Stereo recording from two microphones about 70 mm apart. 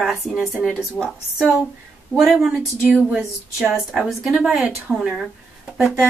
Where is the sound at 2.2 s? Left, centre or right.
Centre.